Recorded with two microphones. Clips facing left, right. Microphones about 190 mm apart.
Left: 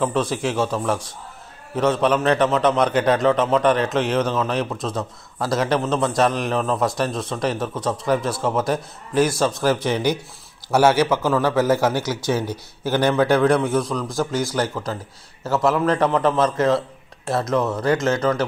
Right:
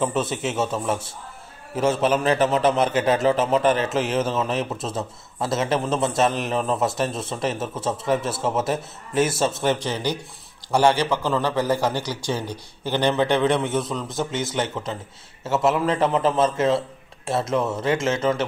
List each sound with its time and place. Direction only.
0.0 s a man's voice: 5° right (ahead or behind)
9.8 s a man's voice: 15° left (ahead or behind); by 14.0 s centre (ahead or behind)
14.0 s a man's voice: 20° right (ahead or behind)